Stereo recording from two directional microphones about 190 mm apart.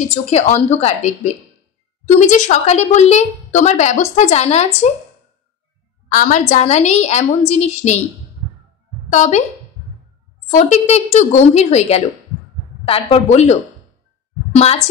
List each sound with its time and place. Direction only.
0.1 s a woman's voice: 35° left (ahead or behind)
6.1 s a woman's voice: 40° left (ahead or behind)
9.1 s a woman's voice: 40° left (ahead or behind)
10.5 s a woman's voice: 35° left (ahead or behind)